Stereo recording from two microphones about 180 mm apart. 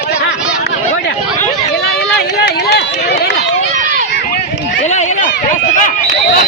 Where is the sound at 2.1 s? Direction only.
65° left (ahead or behind).